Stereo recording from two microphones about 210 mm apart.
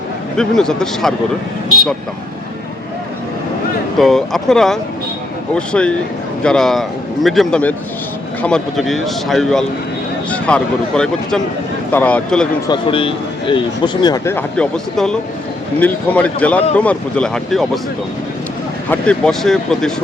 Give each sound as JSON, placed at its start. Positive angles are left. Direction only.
{"t": 0.3, "sound": "speech", "side_deg": 5}
{"t": 3.9, "sound": "speech", "side_deg": 0}
{"t": 12.6, "sound": "a man's voice", "side_deg": 25}
{"t": 18.9, "sound": "speech", "side_deg": 5}